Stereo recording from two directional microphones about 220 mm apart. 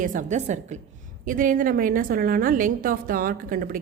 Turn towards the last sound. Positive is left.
turn(degrees=-40)  # may be behind; listen again after turning